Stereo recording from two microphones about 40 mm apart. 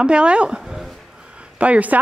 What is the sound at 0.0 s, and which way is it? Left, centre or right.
Speech, right.